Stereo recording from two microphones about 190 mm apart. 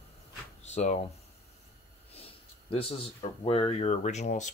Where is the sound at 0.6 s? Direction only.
35° left (ahead or behind).